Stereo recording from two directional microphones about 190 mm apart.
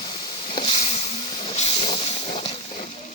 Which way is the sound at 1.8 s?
25° left (ahead or behind).